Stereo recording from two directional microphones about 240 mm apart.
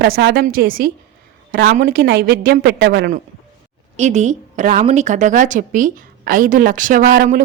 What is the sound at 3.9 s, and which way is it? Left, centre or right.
A woman's voice, right.